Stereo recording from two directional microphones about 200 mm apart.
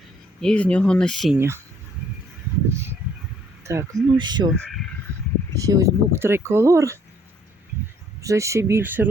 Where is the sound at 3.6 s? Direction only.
15° right (ahead or behind).